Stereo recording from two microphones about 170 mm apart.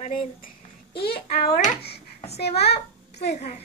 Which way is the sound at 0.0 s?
30° left (ahead or behind).